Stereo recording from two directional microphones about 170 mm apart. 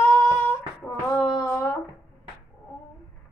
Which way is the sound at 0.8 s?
5° left (ahead or behind).